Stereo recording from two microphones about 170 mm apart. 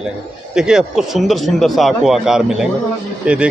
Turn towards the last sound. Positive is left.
turn(degrees=-5)  # may be behind; listen again after turning